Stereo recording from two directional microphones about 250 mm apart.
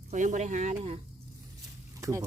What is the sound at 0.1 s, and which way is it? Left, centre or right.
Speech, right.